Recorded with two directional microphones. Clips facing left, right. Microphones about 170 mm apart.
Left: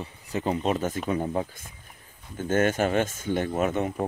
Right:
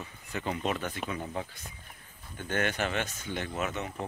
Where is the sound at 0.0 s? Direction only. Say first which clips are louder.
Left 7 dB; 35° left (ahead or behind).